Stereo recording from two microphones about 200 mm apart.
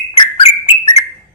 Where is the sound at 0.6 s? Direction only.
30° left (ahead or behind).